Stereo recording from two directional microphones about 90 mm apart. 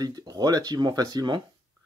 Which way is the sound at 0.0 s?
45° right (ahead or behind).